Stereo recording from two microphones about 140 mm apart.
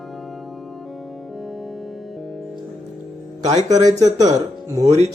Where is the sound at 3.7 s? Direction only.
25° right (ahead or behind).